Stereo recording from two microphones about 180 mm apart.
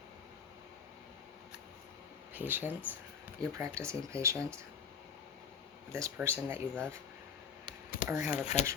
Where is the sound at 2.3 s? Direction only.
10° right (ahead or behind).